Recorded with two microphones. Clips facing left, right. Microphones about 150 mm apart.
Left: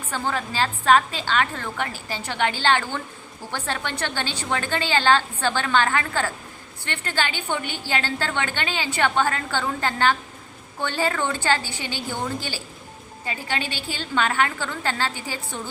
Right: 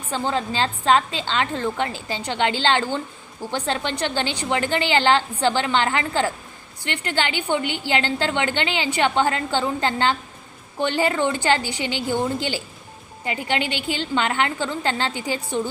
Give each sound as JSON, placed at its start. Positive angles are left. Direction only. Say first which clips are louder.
{"t": 0.1, "sound": "a woman's voice", "louder": "right 3 dB", "side_deg": -20}